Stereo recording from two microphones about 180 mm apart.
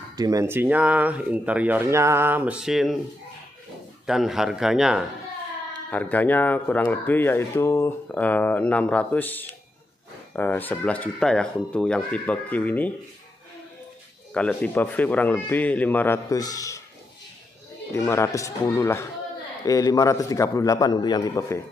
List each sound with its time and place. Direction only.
0.1 s speech: 20° right (ahead or behind); by 3.0 s centre (ahead or behind)
4.0 s a man's voice: centre (ahead or behind)
5.9 s speech: 10° left (ahead or behind)
14.3 s speech: 5° left (ahead or behind)
17.9 s a man's voice: 15° left (ahead or behind)